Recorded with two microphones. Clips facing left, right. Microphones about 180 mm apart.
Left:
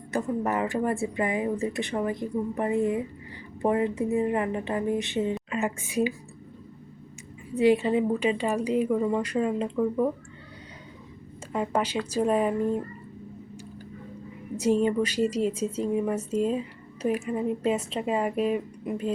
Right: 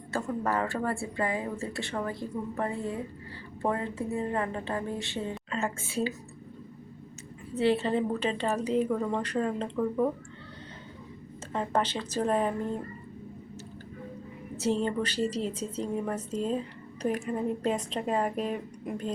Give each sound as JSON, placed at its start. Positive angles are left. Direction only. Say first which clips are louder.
{"t": 0.1, "sound": "a woman's voice", "louder": "left 3 dB", "side_deg": 20}
{"t": 7.5, "sound": "a woman's voice", "louder": "left 4 dB", "side_deg": 15}
{"t": 11.5, "sound": "a woman's voice", "louder": "left 2 dB", "side_deg": 10}
{"t": 14.5, "sound": "a woman's voice", "louder": "left 5 dB", "side_deg": 10}